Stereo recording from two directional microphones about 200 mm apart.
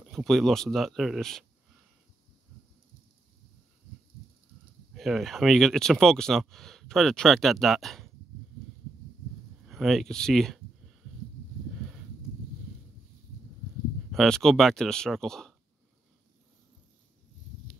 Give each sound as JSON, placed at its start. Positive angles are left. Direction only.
{"t": 0.1, "sound": "speech", "side_deg": 0}
{"t": 4.9, "sound": "speech", "side_deg": 0}
{"t": 9.7, "sound": "speech", "side_deg": 0}
{"t": 14.1, "sound": "speech", "side_deg": 0}